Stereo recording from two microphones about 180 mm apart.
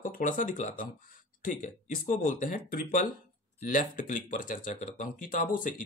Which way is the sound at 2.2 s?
45° left (ahead or behind).